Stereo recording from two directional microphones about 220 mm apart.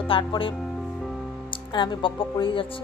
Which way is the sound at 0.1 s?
25° left (ahead or behind).